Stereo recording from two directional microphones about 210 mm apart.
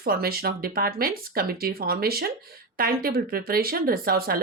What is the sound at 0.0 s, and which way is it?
Speech, 45° right (ahead or behind).